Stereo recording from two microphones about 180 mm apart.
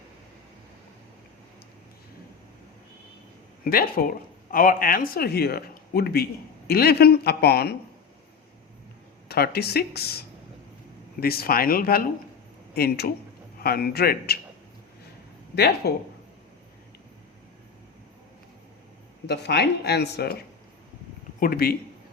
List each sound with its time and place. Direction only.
3.6 s speech: 55° left (ahead or behind)
9.3 s speech: 60° left (ahead or behind)
15.5 s speech: 65° left (ahead or behind)
19.3 s speech: 70° left (ahead or behind)